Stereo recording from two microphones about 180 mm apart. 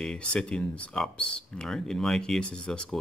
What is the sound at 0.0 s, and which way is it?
Speech, 5° left (ahead or behind).